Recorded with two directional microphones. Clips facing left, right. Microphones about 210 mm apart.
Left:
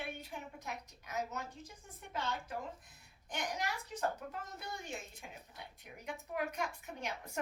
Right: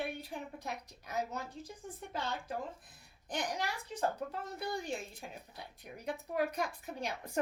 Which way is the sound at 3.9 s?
30° right (ahead or behind).